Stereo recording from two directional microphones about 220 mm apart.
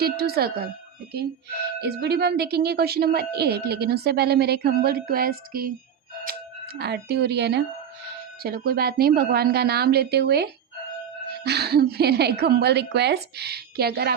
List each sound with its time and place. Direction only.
0.0 s a woman's voice: 45° right (ahead or behind)
1.8 s a woman's voice: 50° right (ahead or behind)
6.7 s a woman's voice: 50° right (ahead or behind)